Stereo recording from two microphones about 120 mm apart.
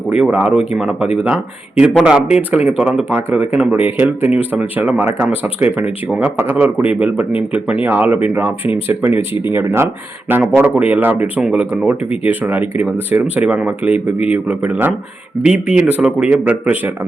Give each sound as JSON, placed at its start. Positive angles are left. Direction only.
{"t": 0.1, "sound": "speech", "side_deg": -10}
{"t": 3.1, "sound": "speech", "side_deg": -20}